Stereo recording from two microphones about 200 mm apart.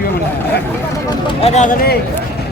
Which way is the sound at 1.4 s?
35° left (ahead or behind).